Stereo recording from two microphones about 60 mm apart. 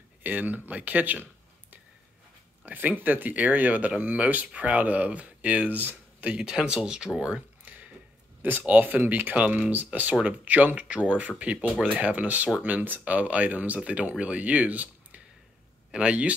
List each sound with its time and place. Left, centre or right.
0.2 s speech: right
6.2 s speech: centre
7.6 s a sound: right
8.4 s speech: right